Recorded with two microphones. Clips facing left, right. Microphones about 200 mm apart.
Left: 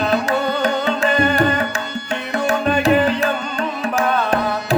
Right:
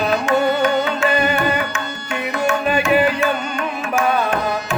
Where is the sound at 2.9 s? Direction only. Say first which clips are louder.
Even; 10° right (ahead or behind).